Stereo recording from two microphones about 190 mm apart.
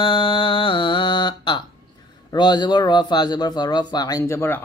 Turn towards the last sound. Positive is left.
turn(degrees=10)  # may be behind; listen again after turning